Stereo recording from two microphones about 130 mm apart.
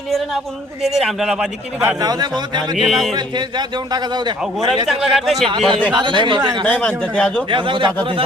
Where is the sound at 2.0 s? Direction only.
30° right (ahead or behind).